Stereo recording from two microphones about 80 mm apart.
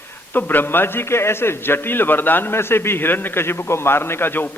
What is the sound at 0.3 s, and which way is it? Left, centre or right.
A man's voice, left.